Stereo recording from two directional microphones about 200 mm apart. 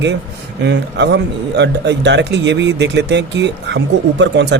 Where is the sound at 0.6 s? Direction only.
60° right (ahead or behind).